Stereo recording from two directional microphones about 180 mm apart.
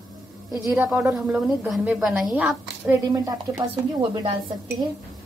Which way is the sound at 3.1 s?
20° right (ahead or behind).